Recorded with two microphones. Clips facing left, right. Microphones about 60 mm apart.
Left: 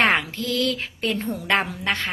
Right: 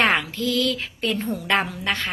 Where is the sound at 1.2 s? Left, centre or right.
Centre.